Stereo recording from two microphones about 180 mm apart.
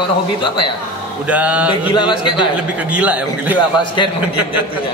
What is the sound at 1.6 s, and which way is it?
Mantra, 25° left (ahead or behind).